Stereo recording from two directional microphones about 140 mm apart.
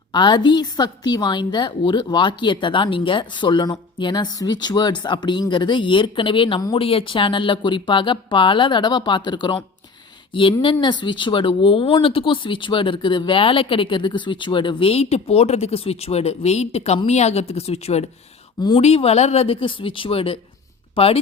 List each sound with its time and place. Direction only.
0.1 s a woman's voice: 30° left (ahead or behind)